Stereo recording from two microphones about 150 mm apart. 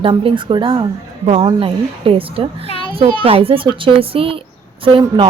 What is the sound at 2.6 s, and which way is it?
Children playing, 40° left (ahead or behind).